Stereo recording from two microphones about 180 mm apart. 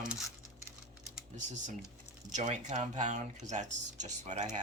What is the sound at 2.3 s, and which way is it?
Speech, 40° right (ahead or behind).